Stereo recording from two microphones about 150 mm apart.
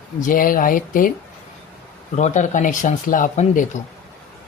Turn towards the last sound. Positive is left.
turn(degrees=60)  # may be behind; listen again after turning